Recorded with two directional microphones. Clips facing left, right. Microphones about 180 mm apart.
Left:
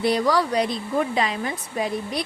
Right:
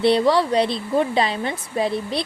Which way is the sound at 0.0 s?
25° right (ahead or behind).